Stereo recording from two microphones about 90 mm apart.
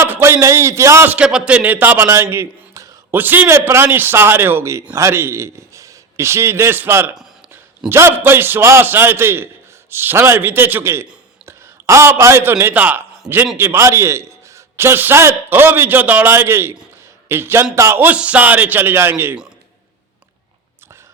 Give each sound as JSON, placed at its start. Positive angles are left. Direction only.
{"t": 0.0, "sound": "a man's voice", "side_deg": -30}
{"t": 1.1, "sound": "a man's voice", "side_deg": -10}
{"t": 3.1, "sound": "a man's voice", "side_deg": -20}
{"t": 13.6, "sound": "a man's voice", "side_deg": -30}